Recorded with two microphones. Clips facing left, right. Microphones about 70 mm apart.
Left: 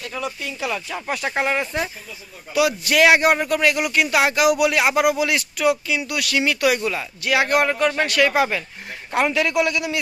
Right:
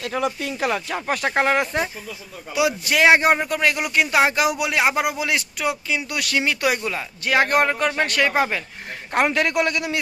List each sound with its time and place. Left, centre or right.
0.0 s a man's voice: right
2.6 s speech: right
3.3 s speech: centre
3.6 s speech: right
7.3 s a man's voice: right